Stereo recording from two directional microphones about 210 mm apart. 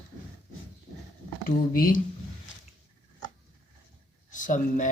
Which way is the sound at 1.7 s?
40° left (ahead or behind).